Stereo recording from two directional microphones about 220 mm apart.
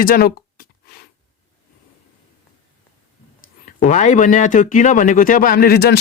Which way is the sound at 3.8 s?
35° left (ahead or behind).